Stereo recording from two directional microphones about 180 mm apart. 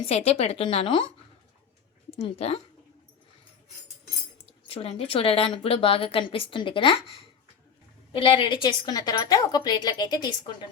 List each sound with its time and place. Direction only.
0.0 s a woman's voice: 35° left (ahead or behind)
2.0 s speech: 35° left (ahead or behind)
4.7 s a woman's voice: 30° left (ahead or behind)